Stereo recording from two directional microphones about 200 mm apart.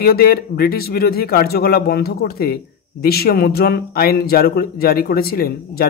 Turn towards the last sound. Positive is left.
turn(degrees=50)  # may be behind; listen again after turning